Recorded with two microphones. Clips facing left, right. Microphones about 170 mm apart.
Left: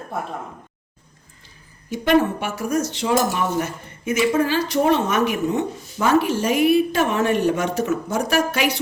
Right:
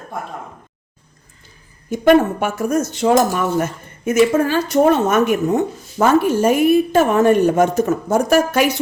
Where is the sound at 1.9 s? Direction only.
50° right (ahead or behind).